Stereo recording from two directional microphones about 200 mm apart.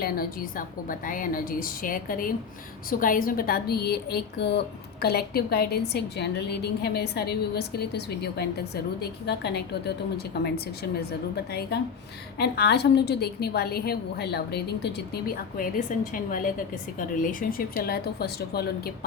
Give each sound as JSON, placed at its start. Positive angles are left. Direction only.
{"t": 0.0, "sound": "a woman's voice", "side_deg": 45}